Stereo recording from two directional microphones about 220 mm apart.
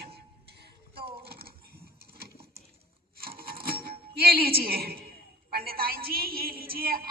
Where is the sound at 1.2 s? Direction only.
45° right (ahead or behind).